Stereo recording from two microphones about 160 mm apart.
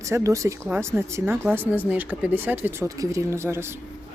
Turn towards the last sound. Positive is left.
turn(degrees=-15)  # may be behind; listen again after turning